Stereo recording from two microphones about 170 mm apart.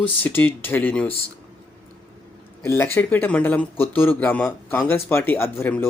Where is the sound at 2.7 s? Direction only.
15° left (ahead or behind).